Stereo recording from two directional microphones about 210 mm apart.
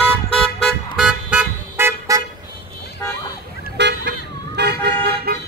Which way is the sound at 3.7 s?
55° right (ahead or behind).